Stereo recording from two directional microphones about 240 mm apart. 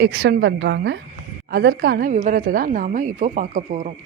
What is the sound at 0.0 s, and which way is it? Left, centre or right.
A woman's voice, right.